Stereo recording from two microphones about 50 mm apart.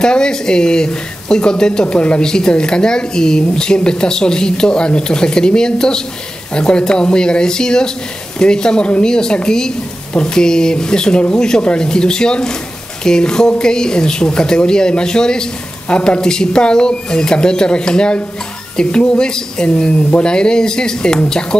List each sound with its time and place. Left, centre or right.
0.0 s speech: centre